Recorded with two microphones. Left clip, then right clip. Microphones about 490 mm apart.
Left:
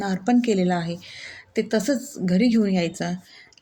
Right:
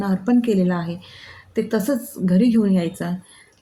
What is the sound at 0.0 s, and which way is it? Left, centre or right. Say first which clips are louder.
A woman's voice: right 2 dB; right.